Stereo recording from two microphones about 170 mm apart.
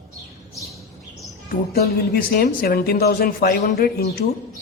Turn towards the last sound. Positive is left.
turn(degrees=65)  # may be behind; listen again after turning